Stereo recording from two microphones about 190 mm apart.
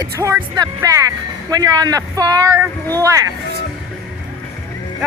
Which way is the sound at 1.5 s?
20° right (ahead or behind).